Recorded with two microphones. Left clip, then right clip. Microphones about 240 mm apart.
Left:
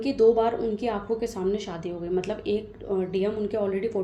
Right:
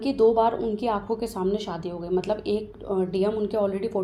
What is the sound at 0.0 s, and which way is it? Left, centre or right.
Speech, right.